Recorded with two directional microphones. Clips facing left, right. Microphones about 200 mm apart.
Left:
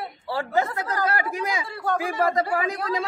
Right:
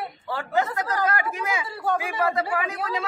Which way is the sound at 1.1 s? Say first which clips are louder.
Left 1 dB; 35° left (ahead or behind).